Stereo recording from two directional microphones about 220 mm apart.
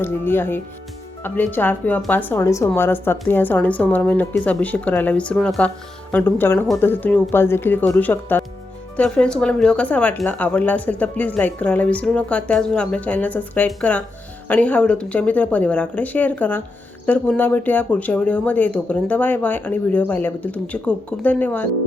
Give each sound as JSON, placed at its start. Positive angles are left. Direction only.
{"t": 0.0, "sound": "a woman's voice", "side_deg": 10}